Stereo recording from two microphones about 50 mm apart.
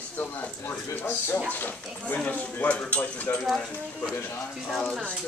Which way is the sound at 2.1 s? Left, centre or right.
Left.